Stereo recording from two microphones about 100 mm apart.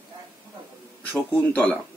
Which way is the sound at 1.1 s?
15° left (ahead or behind).